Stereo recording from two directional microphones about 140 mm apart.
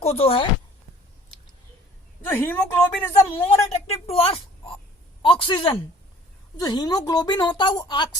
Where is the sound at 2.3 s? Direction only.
15° left (ahead or behind).